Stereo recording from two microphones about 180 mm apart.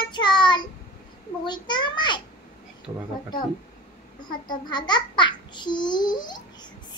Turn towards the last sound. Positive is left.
turn(degrees=25)  # may be behind; listen again after turning